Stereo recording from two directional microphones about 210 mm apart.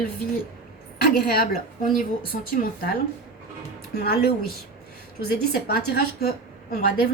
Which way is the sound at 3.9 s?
45° left (ahead or behind).